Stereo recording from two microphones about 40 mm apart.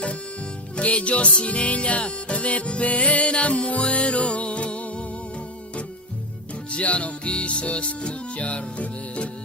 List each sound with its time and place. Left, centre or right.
0.8 s music: left
6.7 s music: left